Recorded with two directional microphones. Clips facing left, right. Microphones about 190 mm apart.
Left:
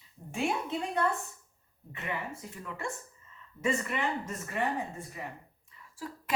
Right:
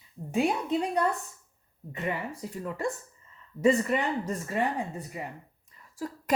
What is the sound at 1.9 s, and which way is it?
Speech, 35° right (ahead or behind).